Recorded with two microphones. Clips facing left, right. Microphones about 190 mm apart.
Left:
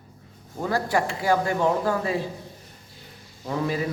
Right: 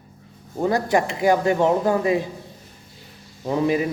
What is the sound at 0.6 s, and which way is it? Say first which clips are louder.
A man's voice: right 4 dB; 20° right (ahead or behind).